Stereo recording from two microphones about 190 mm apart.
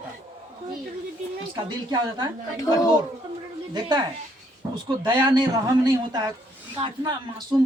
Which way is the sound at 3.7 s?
25° right (ahead or behind).